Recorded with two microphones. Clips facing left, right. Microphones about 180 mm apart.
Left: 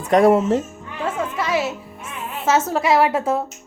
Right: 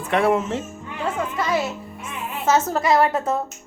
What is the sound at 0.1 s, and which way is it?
Speech, 40° left (ahead or behind).